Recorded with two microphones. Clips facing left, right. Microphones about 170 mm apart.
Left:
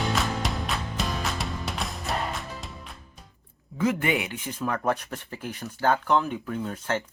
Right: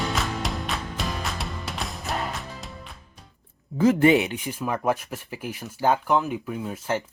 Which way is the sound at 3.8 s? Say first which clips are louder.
Right 7 dB; 30° right (ahead or behind).